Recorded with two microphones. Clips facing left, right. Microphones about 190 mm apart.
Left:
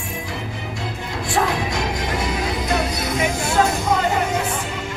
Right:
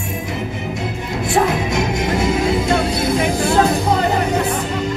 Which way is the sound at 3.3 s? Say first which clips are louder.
Right 4 dB; 35° right (ahead or behind).